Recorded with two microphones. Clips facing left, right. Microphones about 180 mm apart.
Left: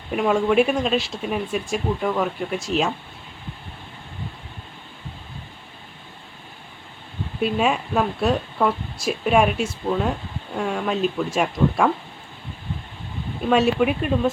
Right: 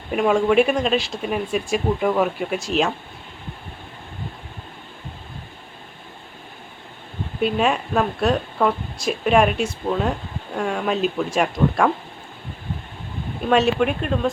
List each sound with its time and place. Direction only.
0.1 s speech: centre (ahead or behind)
7.4 s speech: centre (ahead or behind)
13.5 s speech: centre (ahead or behind)